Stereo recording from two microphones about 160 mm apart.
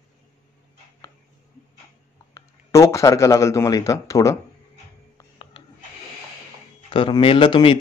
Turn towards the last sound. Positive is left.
turn(degrees=30)  # may be behind; listen again after turning